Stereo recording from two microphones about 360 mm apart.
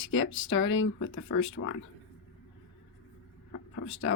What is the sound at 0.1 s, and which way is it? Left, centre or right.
Speech, left.